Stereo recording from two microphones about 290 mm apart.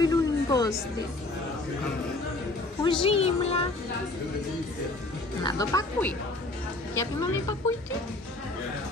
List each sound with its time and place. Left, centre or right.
0.0 s a sound: centre
2.8 s speech: centre
5.4 s speech: centre